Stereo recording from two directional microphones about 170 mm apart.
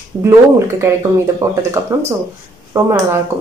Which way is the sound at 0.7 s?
15° right (ahead or behind).